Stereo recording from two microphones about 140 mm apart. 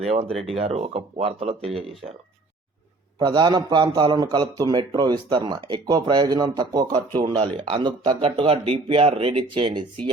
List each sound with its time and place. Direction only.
0.0 s speech: 45° right (ahead or behind)
3.2 s a man's voice: 30° right (ahead or behind)